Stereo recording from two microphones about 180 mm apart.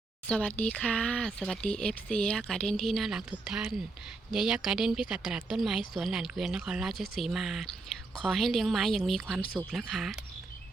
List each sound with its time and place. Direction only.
0.3 s speech: 5° left (ahead or behind)